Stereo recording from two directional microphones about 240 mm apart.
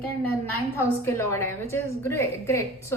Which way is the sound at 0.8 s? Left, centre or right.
Centre.